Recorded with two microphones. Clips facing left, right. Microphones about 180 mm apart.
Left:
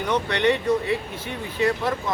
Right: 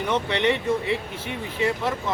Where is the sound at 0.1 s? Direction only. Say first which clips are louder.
Left 2 dB; 25° right (ahead or behind).